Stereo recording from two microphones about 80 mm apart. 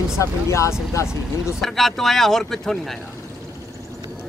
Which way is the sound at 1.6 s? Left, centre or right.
Centre.